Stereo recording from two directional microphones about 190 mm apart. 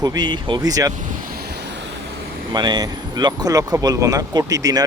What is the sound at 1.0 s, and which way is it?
Vehicle, 45° right (ahead or behind).